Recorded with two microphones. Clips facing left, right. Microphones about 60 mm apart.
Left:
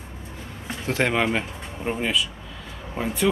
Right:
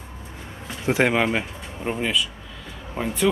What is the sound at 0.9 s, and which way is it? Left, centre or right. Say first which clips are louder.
Speech: right 2 dB; centre.